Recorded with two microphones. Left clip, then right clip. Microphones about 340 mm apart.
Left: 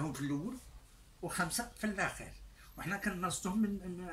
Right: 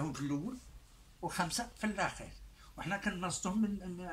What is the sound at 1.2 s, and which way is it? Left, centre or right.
Speech, centre.